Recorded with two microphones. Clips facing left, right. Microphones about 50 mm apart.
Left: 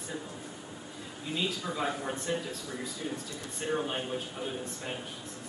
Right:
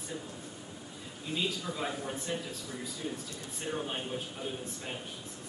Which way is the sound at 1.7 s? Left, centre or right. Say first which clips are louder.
Left 3 dB; centre.